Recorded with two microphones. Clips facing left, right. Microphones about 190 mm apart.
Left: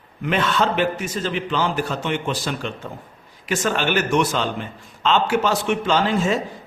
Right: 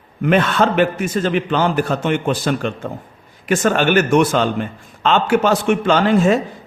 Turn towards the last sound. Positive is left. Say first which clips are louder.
# right 6 dB
turn(degrees=-55)  # may be behind; listen again after turning